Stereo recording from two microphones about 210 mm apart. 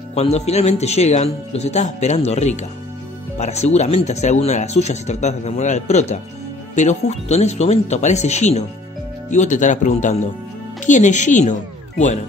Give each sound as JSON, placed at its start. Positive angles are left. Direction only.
{"t": 0.1, "sound": "speech", "side_deg": 30}